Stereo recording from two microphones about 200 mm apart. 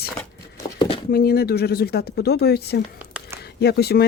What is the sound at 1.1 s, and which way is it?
Speech, 50° left (ahead or behind).